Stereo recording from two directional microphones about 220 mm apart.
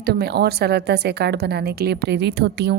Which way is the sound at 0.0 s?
45° right (ahead or behind).